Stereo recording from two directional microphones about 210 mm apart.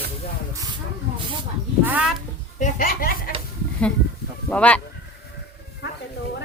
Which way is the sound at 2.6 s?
40° left (ahead or behind).